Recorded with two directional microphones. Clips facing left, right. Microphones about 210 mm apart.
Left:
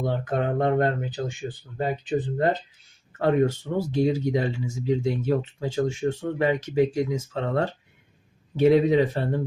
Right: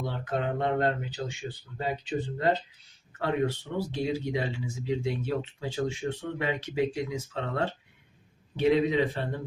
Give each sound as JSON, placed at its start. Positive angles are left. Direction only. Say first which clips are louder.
{"t": 0.0, "sound": "speech", "louder": "left 5 dB", "side_deg": 45}